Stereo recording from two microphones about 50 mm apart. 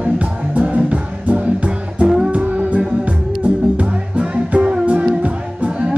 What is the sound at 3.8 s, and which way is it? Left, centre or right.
Music, right.